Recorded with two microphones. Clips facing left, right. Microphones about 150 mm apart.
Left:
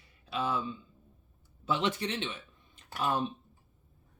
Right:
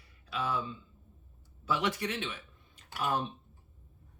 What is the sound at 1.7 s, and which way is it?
Speech, 25° left (ahead or behind).